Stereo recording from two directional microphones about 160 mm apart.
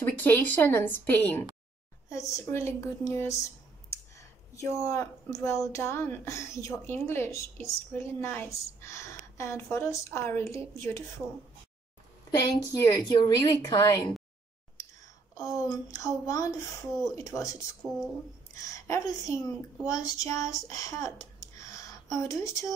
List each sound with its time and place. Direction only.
0.0 s a woman's voice: 10° left (ahead or behind)
12.5 s a woman's voice: 20° left (ahead or behind)
15.3 s a woman's voice: 20° left (ahead or behind)
18.6 s a woman's voice: 20° left (ahead or behind)